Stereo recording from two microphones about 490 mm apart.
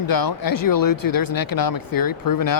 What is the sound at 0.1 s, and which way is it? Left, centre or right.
Speech, left.